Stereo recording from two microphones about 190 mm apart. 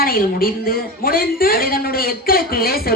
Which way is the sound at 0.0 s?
50° left (ahead or behind).